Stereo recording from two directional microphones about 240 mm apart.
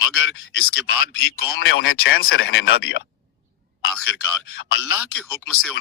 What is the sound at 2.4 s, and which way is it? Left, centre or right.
Speech, left.